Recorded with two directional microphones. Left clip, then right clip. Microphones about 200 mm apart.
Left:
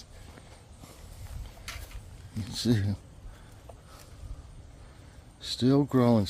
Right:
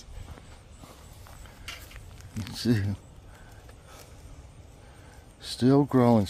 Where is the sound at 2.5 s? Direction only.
10° left (ahead or behind).